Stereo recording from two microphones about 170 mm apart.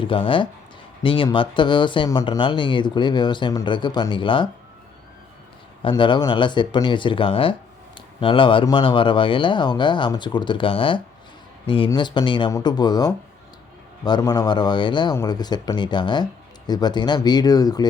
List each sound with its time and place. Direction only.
0.0 s speech: 30° left (ahead or behind)
5.8 s speech: 30° left (ahead or behind)